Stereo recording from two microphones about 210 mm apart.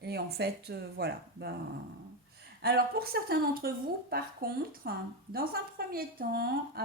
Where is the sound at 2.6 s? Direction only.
45° right (ahead or behind).